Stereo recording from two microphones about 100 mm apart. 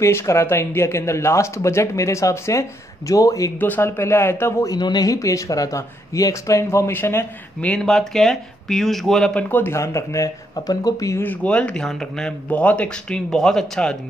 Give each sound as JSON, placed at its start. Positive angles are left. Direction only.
{"t": 0.0, "sound": "speech", "side_deg": 30}
{"t": 3.5, "sound": "speech", "side_deg": 20}
{"t": 4.6, "sound": "speech", "side_deg": 45}
{"t": 7.6, "sound": "speech", "side_deg": 10}
{"t": 9.3, "sound": "speech", "side_deg": 15}
{"t": 11.2, "sound": "speech", "side_deg": 10}